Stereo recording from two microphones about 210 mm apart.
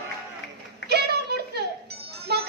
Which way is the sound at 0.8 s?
50° right (ahead or behind).